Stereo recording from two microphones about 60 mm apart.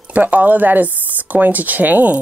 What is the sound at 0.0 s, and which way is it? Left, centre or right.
Speech, right.